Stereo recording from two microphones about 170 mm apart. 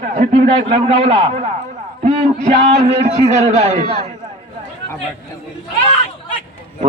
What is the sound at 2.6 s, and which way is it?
A man's voice, 40° right (ahead or behind).